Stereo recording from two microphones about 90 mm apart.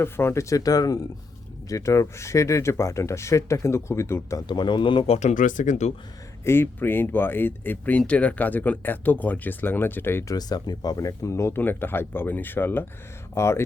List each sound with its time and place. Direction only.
0.0 s speech: 25° left (ahead or behind)
4.4 s a man's voice: 60° left (ahead or behind)
6.4 s speech: 25° left (ahead or behind)
10.2 s speech: 45° left (ahead or behind); by 13.6 s 30° left (ahead or behind)